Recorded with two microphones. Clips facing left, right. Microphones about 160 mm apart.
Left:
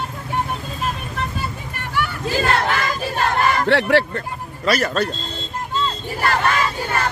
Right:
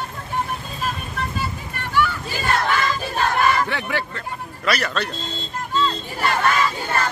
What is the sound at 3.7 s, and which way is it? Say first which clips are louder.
Speech: left 10 dB; 70° left (ahead or behind).